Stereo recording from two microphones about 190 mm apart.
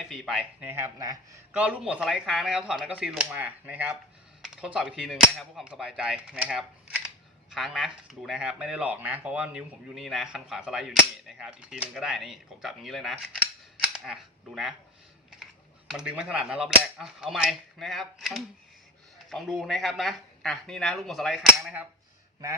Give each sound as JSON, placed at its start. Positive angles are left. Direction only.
{"t": 0.0, "sound": "speech", "side_deg": 0}
{"t": 0.7, "sound": "speech", "side_deg": -15}
{"t": 1.5, "sound": "speech", "side_deg": -5}
{"t": 15.9, "sound": "speech", "side_deg": -5}